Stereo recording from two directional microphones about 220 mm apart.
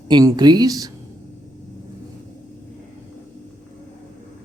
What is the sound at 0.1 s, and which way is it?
Speech, 20° right (ahead or behind).